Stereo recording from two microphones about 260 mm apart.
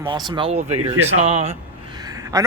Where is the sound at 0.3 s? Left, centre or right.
Centre.